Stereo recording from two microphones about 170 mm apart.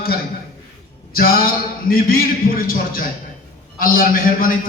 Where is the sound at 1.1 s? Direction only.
60° left (ahead or behind).